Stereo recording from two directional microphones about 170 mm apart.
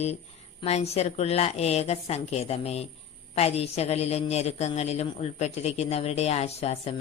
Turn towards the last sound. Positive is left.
turn(degrees=40)  # may be behind; listen again after turning